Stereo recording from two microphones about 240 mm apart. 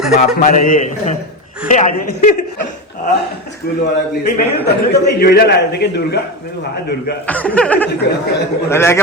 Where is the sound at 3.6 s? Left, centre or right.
Left.